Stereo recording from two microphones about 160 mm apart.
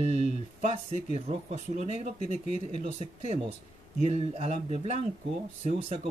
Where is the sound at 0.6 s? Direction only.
40° right (ahead or behind).